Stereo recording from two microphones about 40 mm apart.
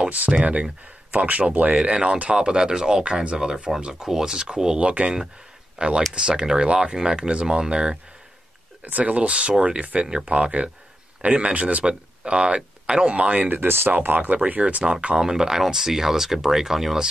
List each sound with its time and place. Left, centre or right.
0.3 s speech: right
1.1 s speech: right; by 3.0 s centre
3.0 s speech: right
8.8 s speech: right
13.7 s speech: right
14.0 s speech: right
14.8 s speech: centre